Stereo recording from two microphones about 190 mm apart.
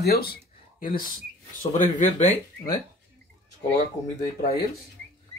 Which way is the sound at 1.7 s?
40° left (ahead or behind).